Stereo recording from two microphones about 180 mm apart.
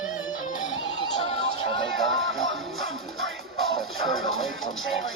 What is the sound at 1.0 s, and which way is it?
Music, 35° left (ahead or behind).